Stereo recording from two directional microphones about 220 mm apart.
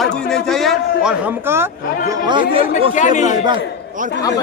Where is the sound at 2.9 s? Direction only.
35° left (ahead or behind).